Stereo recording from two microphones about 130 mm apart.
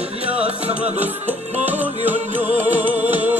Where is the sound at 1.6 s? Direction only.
15° right (ahead or behind).